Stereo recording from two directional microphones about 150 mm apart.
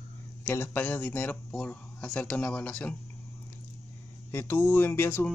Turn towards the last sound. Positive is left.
turn(degrees=15)  # may be behind; listen again after turning